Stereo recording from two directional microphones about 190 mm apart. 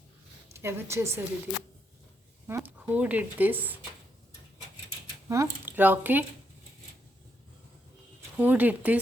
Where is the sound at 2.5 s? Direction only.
15° right (ahead or behind).